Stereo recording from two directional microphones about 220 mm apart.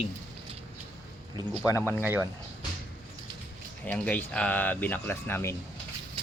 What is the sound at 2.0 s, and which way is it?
Speech, 10° right (ahead or behind).